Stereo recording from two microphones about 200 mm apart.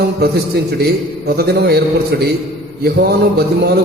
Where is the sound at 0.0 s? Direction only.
50° right (ahead or behind).